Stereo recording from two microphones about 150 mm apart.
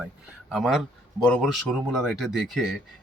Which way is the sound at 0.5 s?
Centre (ahead or behind).